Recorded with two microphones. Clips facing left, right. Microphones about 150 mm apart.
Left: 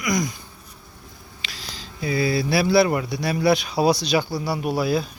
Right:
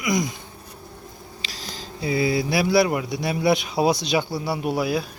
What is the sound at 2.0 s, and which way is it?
Speech, 20° right (ahead or behind).